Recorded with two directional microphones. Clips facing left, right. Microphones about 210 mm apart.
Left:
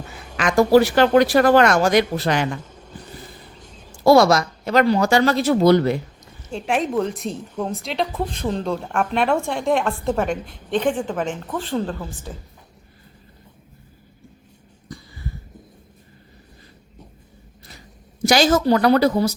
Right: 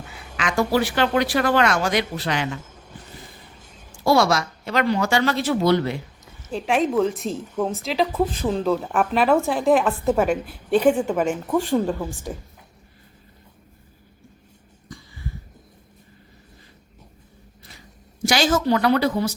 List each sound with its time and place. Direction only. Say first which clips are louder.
0.3 s speech: left 7 dB; 45° left (ahead or behind)
3.6 s a sound: left 4 dB; 5° right (ahead or behind)
4.0 s speech: left 5 dB; 40° left (ahead or behind)
6.5 s a woman's voice: right 1 dB; centre (ahead or behind)
18.3 s speech: left 4 dB; 40° left (ahead or behind)